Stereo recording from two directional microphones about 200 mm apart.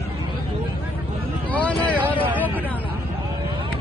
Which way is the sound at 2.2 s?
10° right (ahead or behind).